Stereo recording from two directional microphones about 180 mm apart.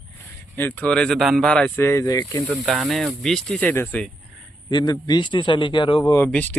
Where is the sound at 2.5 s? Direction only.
Centre (ahead or behind).